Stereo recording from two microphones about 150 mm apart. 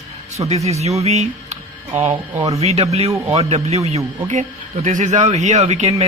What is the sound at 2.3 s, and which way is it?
Speech, 20° right (ahead or behind).